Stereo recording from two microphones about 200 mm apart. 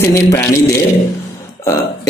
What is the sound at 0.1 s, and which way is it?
Speech, 15° left (ahead or behind).